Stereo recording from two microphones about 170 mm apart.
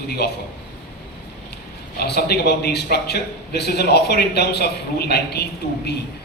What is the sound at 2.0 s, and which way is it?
A man's voice, 70° left (ahead or behind).